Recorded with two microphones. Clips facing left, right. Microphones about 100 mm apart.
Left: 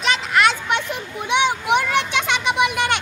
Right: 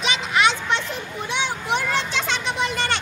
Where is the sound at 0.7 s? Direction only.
15° left (ahead or behind).